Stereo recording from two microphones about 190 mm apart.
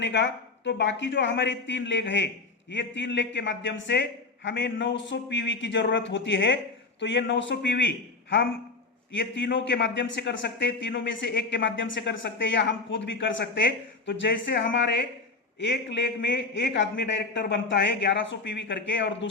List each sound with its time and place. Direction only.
0.0 s a man's voice: 70° left (ahead or behind)